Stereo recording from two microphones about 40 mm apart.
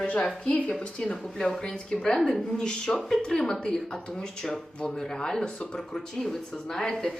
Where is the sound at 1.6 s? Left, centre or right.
Left.